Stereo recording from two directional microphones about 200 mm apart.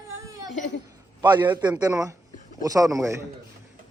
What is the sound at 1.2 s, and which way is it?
A man's voice, 20° right (ahead or behind).